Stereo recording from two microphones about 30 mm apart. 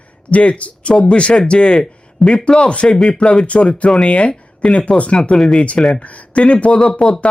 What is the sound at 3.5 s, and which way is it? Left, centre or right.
Speech, left.